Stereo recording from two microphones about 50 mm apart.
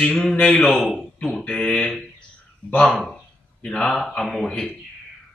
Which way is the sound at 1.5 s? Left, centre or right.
Centre.